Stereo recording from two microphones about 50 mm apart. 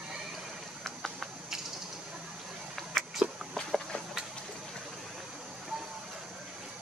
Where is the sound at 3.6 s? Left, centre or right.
Centre.